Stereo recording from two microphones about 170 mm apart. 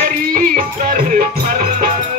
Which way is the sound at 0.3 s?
50° right (ahead or behind).